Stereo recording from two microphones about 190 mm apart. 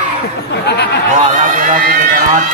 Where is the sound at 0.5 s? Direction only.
60° left (ahead or behind).